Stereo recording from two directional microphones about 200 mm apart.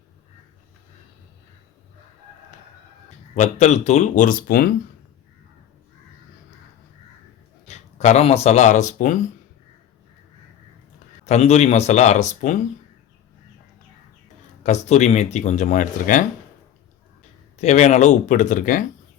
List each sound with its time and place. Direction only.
3.3 s speech: 35° left (ahead or behind)
7.7 s speech: 35° left (ahead or behind)
11.3 s speech: 35° left (ahead or behind)
14.6 s speech: 35° left (ahead or behind)
17.6 s speech: 35° left (ahead or behind)